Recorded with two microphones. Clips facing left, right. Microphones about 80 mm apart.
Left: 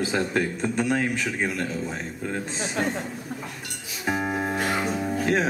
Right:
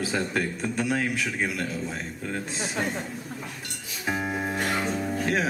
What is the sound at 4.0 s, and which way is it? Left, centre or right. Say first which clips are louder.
Music: left 2 dB; centre.